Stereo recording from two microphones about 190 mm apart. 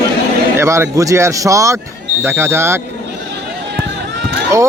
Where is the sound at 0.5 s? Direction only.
15° right (ahead or behind).